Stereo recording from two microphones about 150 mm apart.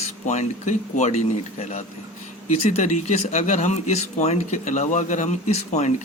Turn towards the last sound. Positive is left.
turn(degrees=50)  # may be behind; listen again after turning